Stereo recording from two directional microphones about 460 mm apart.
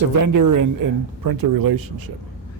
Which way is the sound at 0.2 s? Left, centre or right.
Right.